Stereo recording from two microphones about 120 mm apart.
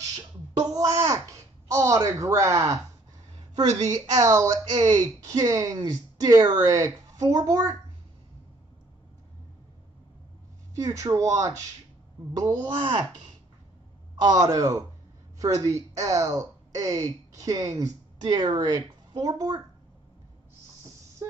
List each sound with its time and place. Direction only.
0.7 s a sound: 30° right (ahead or behind)
3.9 s speech: 30° right (ahead or behind)
10.8 s speech: 30° right (ahead or behind)
14.1 s speech: 30° right (ahead or behind)